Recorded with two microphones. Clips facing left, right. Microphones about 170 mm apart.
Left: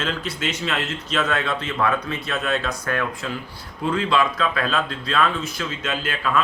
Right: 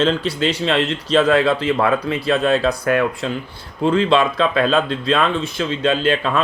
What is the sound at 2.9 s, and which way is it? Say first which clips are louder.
Speech: right 5 dB; 20° right (ahead or behind).